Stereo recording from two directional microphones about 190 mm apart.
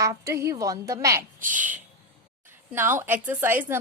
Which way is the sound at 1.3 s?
45° right (ahead or behind).